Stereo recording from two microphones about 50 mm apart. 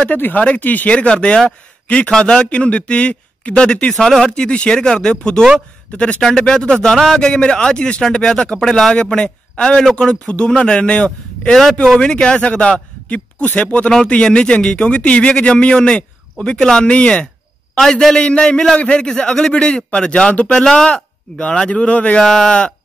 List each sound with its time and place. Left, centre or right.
0.1 s a man's voice: left
4.0 s a man's voice: centre
4.3 s a man's voice: left
22.2 s a man's voice: centre